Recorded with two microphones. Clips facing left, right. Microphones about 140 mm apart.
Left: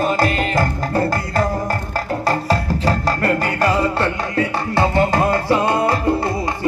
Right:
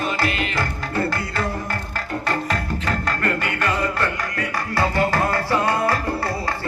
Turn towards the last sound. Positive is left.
turn(degrees=20)  # may be behind; listen again after turning